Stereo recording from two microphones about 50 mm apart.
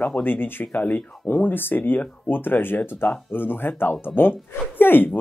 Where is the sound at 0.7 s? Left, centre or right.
Left.